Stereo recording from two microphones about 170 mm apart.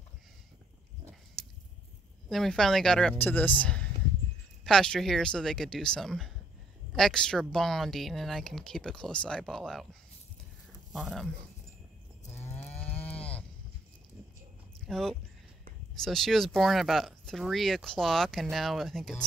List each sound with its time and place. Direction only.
1.4 s a sound: centre (ahead or behind)
2.2 s speech: centre (ahead or behind)
10.9 s speech: centre (ahead or behind)
12.4 s cattle: 15° left (ahead or behind)
12.7 s cattle: 35° left (ahead or behind)
14.9 s speech: centre (ahead or behind)